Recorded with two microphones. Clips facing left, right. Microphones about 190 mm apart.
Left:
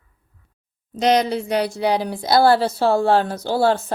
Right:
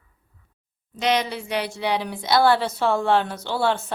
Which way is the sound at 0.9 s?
40° left (ahead or behind).